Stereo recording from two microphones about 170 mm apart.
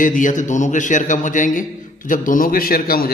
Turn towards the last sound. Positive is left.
turn(degrees=60)  # may be behind; listen again after turning